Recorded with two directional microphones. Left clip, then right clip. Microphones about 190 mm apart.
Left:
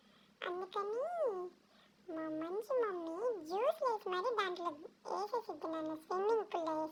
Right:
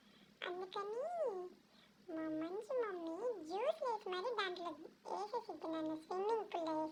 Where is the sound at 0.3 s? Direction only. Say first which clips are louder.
Left 4 dB; 30° left (ahead or behind).